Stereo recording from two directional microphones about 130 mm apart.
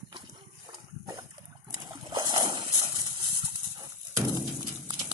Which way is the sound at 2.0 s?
30° right (ahead or behind).